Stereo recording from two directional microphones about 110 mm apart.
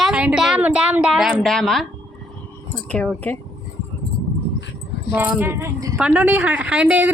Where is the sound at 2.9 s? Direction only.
10° left (ahead or behind).